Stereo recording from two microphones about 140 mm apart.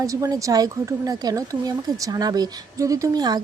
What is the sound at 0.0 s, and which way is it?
Speech, 25° right (ahead or behind).